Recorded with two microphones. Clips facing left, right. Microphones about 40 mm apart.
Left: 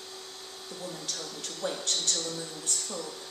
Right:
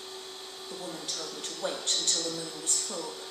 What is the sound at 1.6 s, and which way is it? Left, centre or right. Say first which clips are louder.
Speech: even; right.